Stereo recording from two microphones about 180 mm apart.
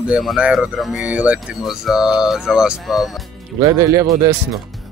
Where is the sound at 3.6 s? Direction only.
20° right (ahead or behind).